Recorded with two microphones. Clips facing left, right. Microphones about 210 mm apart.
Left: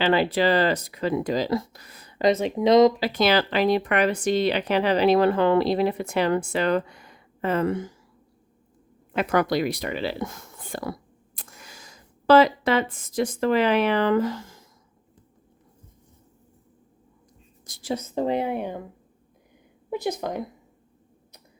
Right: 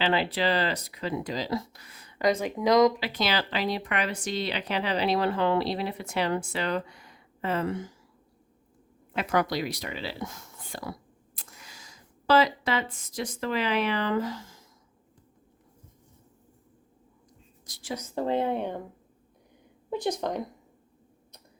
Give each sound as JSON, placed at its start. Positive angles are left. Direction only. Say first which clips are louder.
{"t": 0.0, "sound": "speech", "louder": "left 5 dB", "side_deg": 50}
{"t": 2.2, "sound": "speech", "louder": "left 4 dB", "side_deg": 25}
{"t": 3.0, "sound": "speech", "louder": "left 7 dB", "side_deg": 50}
{"t": 9.1, "sound": "speech", "louder": "left 5 dB", "side_deg": 55}
{"t": 17.8, "sound": "speech", "louder": "left 4 dB", "side_deg": 25}
{"t": 20.1, "sound": "a woman's voice", "louder": "left 1 dB", "side_deg": 5}